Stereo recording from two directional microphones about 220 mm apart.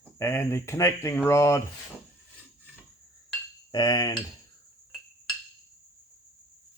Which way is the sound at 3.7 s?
20° left (ahead or behind).